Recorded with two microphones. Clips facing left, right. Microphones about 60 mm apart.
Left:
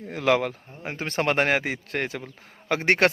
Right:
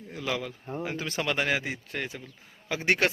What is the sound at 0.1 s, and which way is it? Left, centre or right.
Speech, left.